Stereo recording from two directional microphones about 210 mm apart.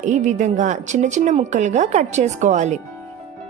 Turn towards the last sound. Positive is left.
turn(degrees=-35)  # may be behind; listen again after turning